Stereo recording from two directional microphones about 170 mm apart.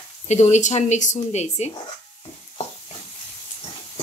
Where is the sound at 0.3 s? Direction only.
45° left (ahead or behind).